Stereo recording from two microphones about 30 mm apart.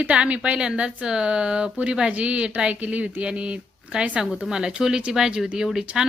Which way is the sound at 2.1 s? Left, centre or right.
Right.